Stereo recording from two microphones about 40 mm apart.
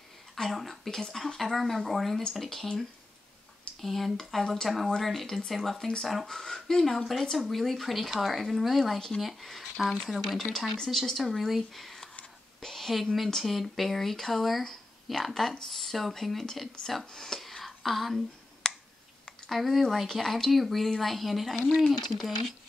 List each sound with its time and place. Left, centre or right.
0.5 s speech: centre
3.8 s a woman's voice: centre
17.1 s a sound: centre
18.6 s finger snapping: centre
19.4 s speech: centre